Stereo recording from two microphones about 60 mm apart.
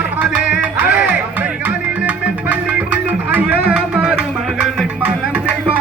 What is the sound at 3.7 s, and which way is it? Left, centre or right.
Music, centre.